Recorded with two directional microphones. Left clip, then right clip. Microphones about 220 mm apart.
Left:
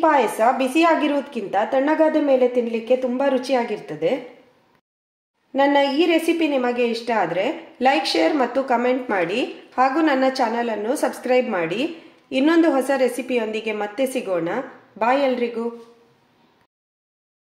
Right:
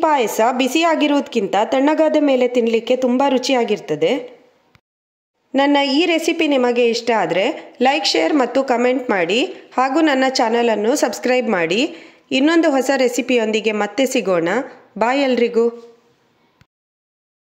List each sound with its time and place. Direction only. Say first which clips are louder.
0.0 s a woman's voice: right 1 dB; 40° right (ahead or behind)
5.5 s a woman's voice: right 2 dB; 40° right (ahead or behind)